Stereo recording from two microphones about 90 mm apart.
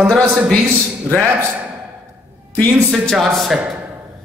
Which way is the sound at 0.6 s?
30° right (ahead or behind).